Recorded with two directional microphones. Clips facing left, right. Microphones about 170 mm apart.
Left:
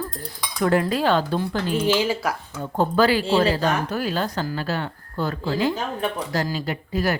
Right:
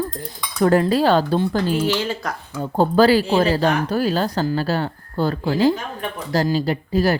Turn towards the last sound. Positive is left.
turn(degrees=-30)  # may be behind; listen again after turning